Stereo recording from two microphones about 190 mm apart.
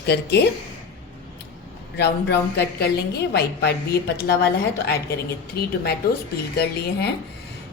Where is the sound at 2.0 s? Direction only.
60° left (ahead or behind).